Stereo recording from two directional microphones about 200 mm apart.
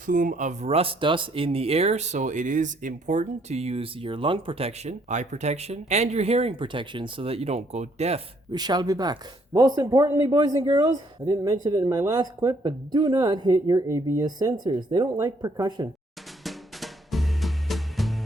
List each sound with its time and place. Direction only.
0.0 s speech: 40° right (ahead or behind)
8.5 s speech: 20° right (ahead or behind)
16.4 s drum: centre (ahead or behind)